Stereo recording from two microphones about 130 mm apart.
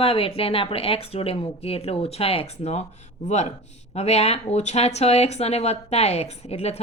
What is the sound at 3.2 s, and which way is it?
Speech, 65° left (ahead or behind).